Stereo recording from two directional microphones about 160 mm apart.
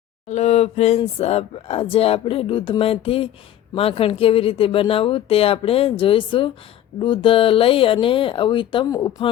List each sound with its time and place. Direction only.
0.3 s speech: 45° left (ahead or behind); by 9.3 s 25° left (ahead or behind)